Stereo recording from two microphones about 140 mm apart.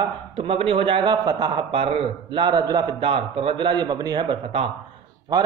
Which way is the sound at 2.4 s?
30° right (ahead or behind).